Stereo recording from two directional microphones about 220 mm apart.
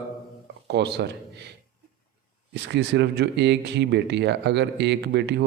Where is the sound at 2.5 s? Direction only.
50° right (ahead or behind).